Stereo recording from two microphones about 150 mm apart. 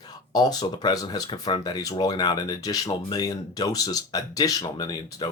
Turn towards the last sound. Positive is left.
turn(degrees=30)  # may be behind; listen again after turning